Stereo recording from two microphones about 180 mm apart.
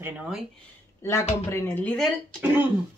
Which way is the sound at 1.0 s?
15° left (ahead or behind).